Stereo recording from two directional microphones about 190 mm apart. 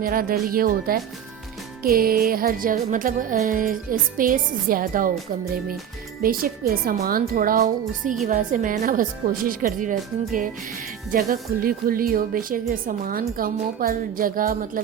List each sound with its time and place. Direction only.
0.0 s speech: 50° right (ahead or behind)
6.2 s speech: 50° right (ahead or behind)